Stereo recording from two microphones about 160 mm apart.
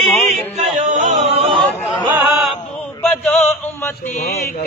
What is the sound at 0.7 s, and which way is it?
Music, 45° right (ahead or behind).